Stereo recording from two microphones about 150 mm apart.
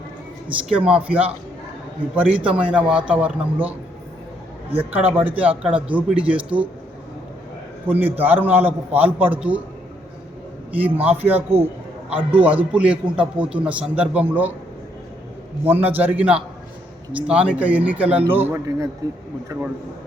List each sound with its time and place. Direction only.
0.7 s a man's voice: 5° right (ahead or behind)
4.8 s a man's voice: 10° right (ahead or behind)
7.9 s a man's voice: 10° right (ahead or behind)
11.0 s a man's voice: 10° right (ahead or behind)
12.1 s a man's voice: 35° right (ahead or behind)
12.7 s a man's voice: 10° right (ahead or behind)
15.6 s a man's voice: 10° right (ahead or behind)